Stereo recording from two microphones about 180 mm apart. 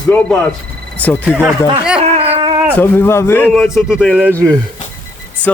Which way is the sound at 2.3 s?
30° right (ahead or behind).